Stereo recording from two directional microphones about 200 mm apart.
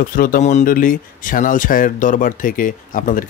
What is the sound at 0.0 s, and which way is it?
Speech, 45° left (ahead or behind).